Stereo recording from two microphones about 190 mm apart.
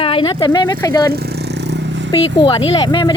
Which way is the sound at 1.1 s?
55° right (ahead or behind).